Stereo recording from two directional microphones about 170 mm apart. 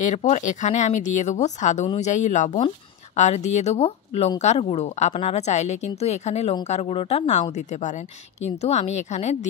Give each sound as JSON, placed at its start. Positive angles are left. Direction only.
{"t": 0.0, "sound": "a woman's voice", "side_deg": 45}